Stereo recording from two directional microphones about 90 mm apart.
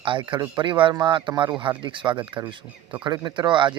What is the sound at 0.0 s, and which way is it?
A man's voice, 70° right (ahead or behind).